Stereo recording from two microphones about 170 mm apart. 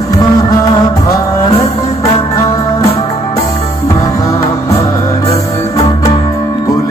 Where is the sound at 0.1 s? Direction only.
20° left (ahead or behind).